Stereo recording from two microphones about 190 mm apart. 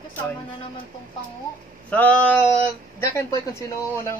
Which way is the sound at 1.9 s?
5° left (ahead or behind).